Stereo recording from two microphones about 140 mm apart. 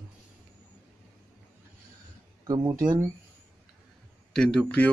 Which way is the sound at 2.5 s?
25° right (ahead or behind).